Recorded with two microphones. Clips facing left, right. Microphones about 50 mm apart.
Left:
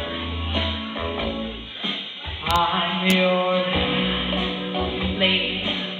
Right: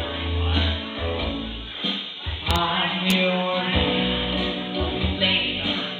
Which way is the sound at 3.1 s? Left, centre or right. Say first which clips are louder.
Left 4 dB; centre.